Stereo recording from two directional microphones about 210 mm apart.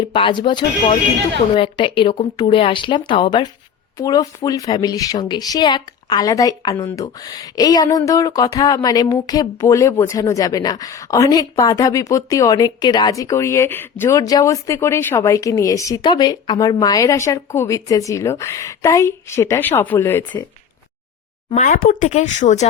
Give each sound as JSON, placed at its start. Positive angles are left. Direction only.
{"t": 0.1, "sound": "speech", "side_deg": 25}
{"t": 21.5, "sound": "speech", "side_deg": 40}